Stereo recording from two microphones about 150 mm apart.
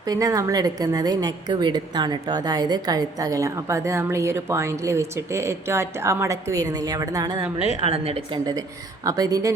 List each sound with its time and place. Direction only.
0.0 s a woman's voice: 25° right (ahead or behind)
7.6 s a woman's voice: 40° right (ahead or behind)
9.0 s a woman's voice: 25° right (ahead or behind)